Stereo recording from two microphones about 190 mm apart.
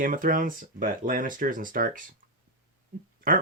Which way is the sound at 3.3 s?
45° right (ahead or behind).